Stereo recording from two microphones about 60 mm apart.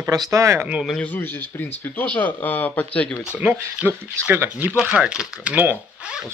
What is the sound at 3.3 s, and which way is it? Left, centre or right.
Speech, right.